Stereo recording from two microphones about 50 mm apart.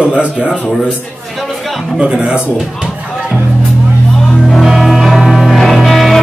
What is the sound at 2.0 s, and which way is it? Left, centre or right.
Speech, centre.